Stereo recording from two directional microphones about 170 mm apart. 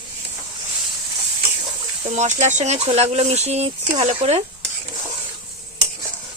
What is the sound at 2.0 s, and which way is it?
Speech, 45° right (ahead or behind).